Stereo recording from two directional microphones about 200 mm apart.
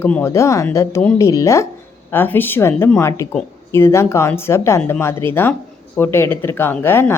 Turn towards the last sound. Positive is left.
turn(degrees=10)  # may be behind; listen again after turning